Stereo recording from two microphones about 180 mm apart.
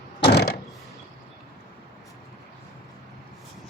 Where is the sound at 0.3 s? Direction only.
60° left (ahead or behind).